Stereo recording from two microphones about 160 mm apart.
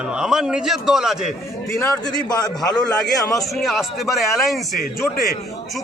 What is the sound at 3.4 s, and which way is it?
A man's voice, centre (ahead or behind).